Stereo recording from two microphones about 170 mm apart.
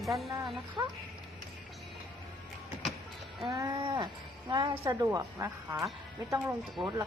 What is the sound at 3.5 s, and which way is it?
Speech, 20° right (ahead or behind).